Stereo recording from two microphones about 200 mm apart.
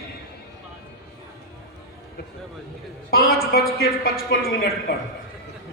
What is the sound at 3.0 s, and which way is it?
A man's voice, 50° left (ahead or behind).